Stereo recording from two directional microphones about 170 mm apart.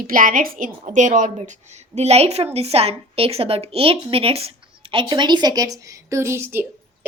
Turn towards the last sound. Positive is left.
turn(degrees=-15)  # may be behind; listen again after turning